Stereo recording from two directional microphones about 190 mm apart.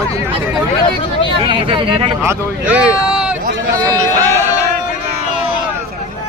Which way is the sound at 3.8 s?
20° right (ahead or behind).